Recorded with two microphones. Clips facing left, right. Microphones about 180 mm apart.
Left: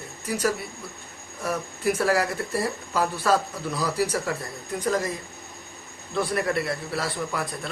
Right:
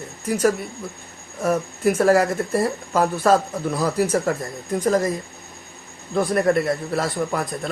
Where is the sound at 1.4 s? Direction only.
45° right (ahead or behind).